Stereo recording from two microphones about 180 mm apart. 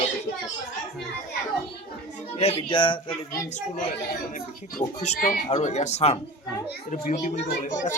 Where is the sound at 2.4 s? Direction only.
30° left (ahead or behind).